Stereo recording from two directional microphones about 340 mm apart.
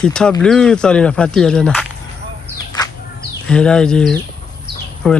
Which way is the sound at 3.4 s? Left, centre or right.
Centre.